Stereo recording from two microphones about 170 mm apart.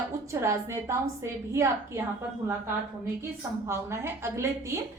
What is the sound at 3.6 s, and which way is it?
A woman's voice, 15° right (ahead or behind).